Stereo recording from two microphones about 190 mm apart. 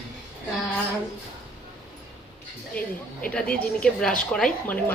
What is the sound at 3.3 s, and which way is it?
Speech, 5° left (ahead or behind).